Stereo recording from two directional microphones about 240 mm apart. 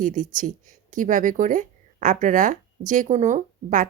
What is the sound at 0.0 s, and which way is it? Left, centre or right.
Speech, right.